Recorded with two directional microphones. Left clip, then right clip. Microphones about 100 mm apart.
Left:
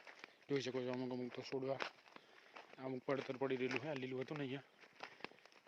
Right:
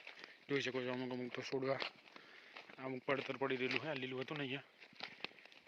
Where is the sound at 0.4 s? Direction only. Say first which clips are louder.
Right 2 dB; 15° left (ahead or behind).